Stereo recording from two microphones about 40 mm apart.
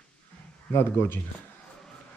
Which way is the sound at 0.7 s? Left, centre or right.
Left.